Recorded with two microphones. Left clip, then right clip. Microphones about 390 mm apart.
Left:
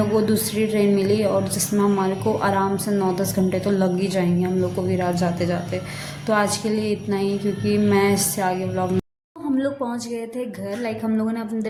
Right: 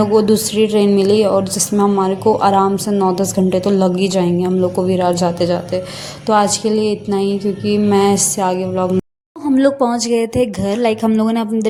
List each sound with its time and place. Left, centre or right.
0.0 s a woman's voice: left